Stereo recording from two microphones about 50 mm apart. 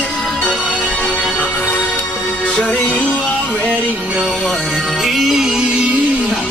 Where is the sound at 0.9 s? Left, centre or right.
Left.